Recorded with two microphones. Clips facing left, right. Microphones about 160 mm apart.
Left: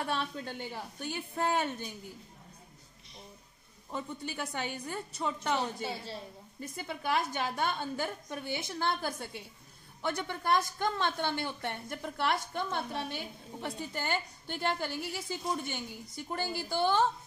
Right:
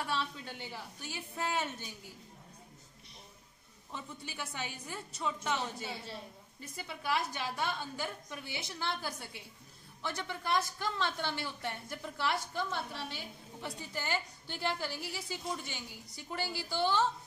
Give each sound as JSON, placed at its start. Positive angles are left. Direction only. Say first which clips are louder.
{"t": 0.0, "sound": "a woman's voice", "louder": "left 3 dB", "side_deg": 55}
{"t": 3.9, "sound": "a woman's voice", "louder": "left 7 dB", "side_deg": 55}